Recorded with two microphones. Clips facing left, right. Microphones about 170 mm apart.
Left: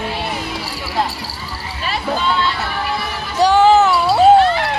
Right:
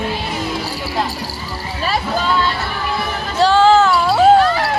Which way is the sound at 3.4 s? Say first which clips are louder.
Even; 15° left (ahead or behind).